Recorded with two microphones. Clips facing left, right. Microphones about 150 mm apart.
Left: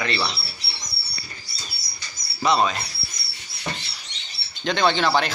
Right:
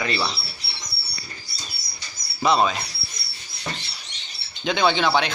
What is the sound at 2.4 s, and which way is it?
Speech, centre (ahead or behind).